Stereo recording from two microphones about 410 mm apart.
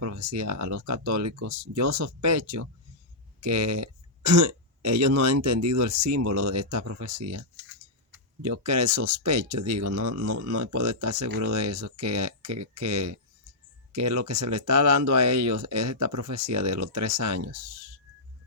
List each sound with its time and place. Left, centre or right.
0.0 s speech: right